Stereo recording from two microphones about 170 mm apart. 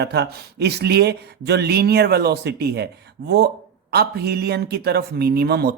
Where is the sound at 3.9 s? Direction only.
70° right (ahead or behind).